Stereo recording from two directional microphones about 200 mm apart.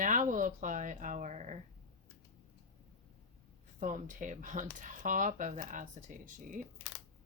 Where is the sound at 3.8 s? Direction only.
40° right (ahead or behind).